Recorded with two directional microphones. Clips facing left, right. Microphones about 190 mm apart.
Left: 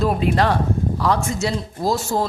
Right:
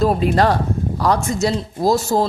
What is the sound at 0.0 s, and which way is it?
Speech, 40° right (ahead or behind).